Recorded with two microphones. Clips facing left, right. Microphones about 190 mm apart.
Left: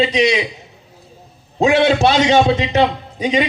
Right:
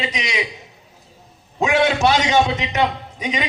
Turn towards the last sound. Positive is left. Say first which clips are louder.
# left 7 dB
turn(degrees=30)  # may be behind; listen again after turning